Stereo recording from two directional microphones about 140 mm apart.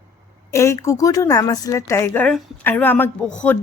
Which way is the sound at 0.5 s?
20° left (ahead or behind).